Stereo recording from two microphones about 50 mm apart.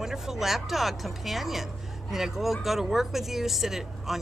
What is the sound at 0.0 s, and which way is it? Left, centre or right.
Speech, centre.